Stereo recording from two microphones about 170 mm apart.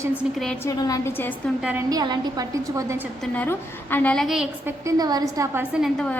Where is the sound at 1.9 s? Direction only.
20° right (ahead or behind).